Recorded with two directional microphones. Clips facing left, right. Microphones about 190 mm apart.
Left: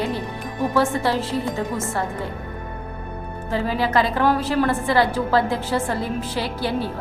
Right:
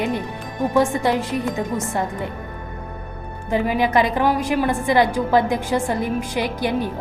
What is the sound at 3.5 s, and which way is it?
A woman's voice, 15° right (ahead or behind).